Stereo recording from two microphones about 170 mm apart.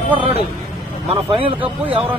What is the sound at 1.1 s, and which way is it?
Speech, 35° right (ahead or behind).